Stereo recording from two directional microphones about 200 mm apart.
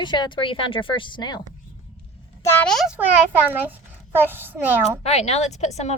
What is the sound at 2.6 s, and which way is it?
Speech, centre (ahead or behind).